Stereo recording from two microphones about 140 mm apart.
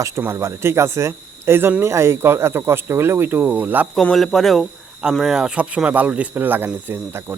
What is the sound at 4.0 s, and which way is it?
A man's voice, centre (ahead or behind).